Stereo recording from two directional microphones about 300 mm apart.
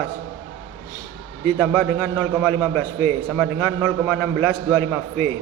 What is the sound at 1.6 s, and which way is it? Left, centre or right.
A man's voice, centre.